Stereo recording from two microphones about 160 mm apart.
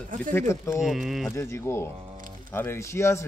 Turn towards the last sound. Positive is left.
turn(degrees=15)  # may be behind; listen again after turning